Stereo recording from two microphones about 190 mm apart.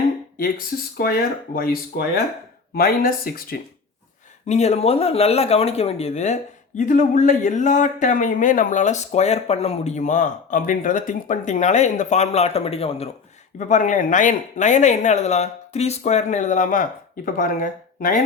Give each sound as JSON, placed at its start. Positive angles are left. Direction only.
{"t": 1.5, "sound": "speech", "side_deg": 50}
{"t": 4.4, "sound": "speech", "side_deg": 35}